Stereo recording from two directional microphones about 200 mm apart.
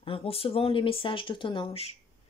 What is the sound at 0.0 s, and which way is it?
Speech, 30° left (ahead or behind).